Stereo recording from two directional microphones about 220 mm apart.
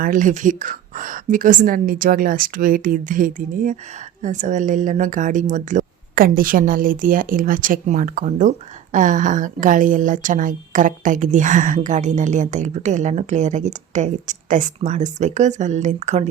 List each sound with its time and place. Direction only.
0.0 s a woman's voice: 35° right (ahead or behind)